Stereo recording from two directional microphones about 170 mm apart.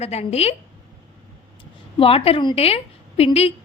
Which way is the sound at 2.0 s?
35° left (ahead or behind).